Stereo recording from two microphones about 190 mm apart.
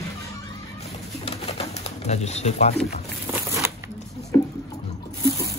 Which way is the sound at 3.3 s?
15° right (ahead or behind).